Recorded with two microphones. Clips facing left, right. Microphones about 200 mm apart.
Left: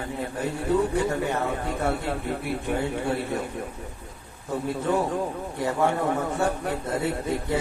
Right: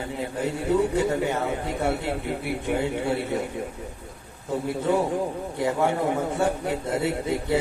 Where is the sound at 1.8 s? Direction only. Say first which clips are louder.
Right 1 dB; 15° right (ahead or behind).